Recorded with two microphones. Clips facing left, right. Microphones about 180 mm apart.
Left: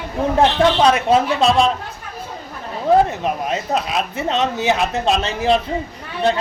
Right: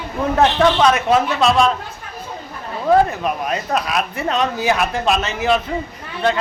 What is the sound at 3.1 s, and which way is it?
Speech, 25° left (ahead or behind).